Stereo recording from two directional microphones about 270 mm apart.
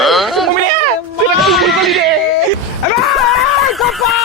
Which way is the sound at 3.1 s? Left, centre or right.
Centre.